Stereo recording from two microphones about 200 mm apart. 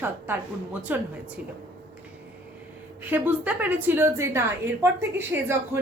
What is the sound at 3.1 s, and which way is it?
A woman's voice, 10° right (ahead or behind).